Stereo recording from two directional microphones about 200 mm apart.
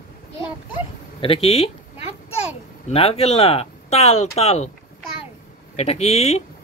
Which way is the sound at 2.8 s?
30° left (ahead or behind).